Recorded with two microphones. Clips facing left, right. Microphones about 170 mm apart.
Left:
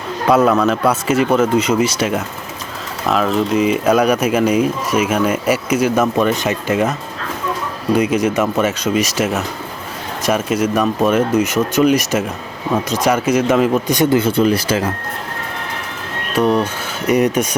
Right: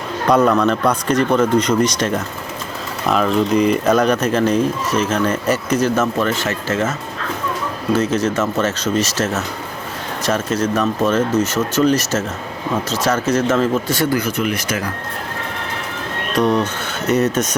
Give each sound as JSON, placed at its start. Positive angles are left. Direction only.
{"t": 0.3, "sound": "speech", "side_deg": 5}
{"t": 7.9, "sound": "speech", "side_deg": 15}
{"t": 16.3, "sound": "speech", "side_deg": 10}